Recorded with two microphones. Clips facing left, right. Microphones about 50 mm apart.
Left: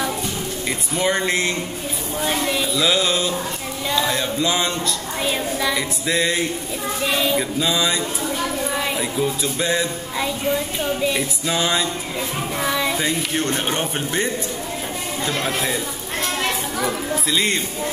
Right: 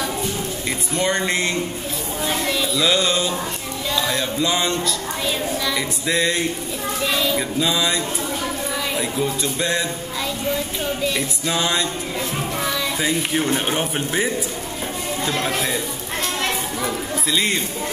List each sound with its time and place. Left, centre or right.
0.9 s speech: centre
2.2 s speech: centre
5.2 s a woman's voice: centre
5.8 s speech: centre
7.0 s a woman's voice: centre
7.3 s speech: centre
11.1 s speech: centre
12.5 s a child's voice: centre
13.0 s speech: centre
17.3 s speech: centre